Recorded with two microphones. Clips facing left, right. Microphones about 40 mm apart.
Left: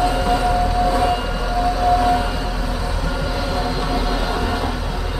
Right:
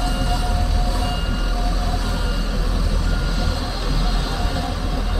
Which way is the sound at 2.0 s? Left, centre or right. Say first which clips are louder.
Left 11 dB; centre.